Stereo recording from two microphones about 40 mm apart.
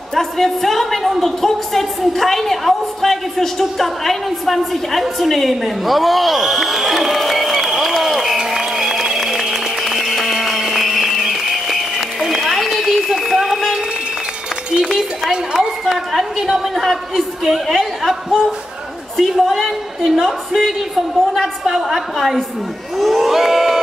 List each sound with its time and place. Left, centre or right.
0.1 s a woman's voice: centre
9.8 s music: centre
10.3 s a sound: centre
14.8 s a sound: centre
15.8 s a woman's voice: centre
22.9 s crowd: centre